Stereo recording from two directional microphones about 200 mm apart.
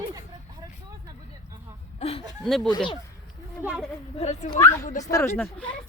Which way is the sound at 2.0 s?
30° left (ahead or behind).